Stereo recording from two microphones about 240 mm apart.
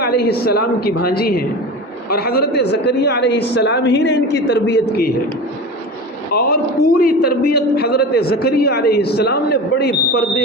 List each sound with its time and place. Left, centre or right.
0.0 s a man's voice: left
6.3 s a man's voice: left